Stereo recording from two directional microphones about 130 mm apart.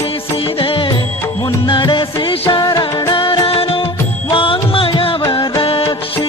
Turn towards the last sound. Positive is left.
turn(degrees=45)  # may be behind; listen again after turning